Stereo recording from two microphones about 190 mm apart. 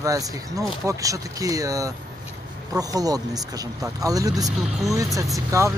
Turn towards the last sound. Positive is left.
turn(degrees=-15)  # may be behind; listen again after turning